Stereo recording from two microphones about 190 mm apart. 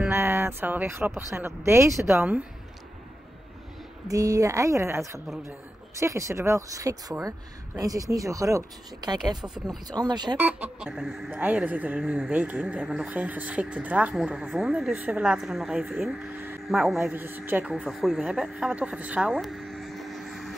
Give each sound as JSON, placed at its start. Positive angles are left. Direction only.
{"t": 0.0, "sound": "speech", "side_deg": -10}
{"t": 4.1, "sound": "speech", "side_deg": -20}
{"t": 10.3, "sound": "speech", "side_deg": -10}